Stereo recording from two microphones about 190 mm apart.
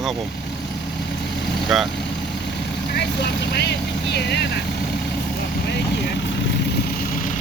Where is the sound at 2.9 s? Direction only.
60° left (ahead or behind).